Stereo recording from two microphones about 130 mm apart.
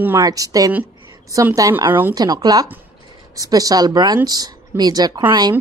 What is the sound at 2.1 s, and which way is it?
A woman's voice, 30° right (ahead or behind).